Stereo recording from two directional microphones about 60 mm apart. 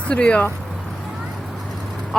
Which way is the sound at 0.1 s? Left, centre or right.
Left.